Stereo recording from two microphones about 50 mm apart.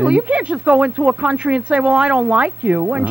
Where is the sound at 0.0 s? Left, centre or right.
Right.